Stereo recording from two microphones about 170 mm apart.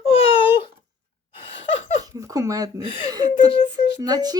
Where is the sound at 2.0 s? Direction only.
20° right (ahead or behind).